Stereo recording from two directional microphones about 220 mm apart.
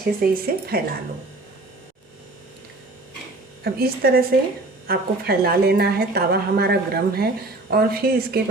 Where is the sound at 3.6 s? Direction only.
45° right (ahead or behind).